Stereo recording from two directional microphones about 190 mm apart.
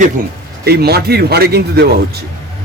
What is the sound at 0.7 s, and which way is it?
Speech, 55° right (ahead or behind).